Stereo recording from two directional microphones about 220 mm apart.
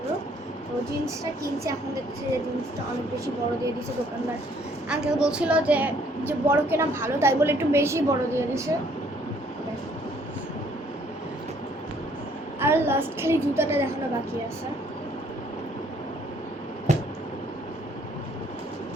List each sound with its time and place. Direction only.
4.9 s a woman's voice: 5° right (ahead or behind)
12.5 s a woman's voice: 10° right (ahead or behind)
16.9 s a sound: 30° right (ahead or behind)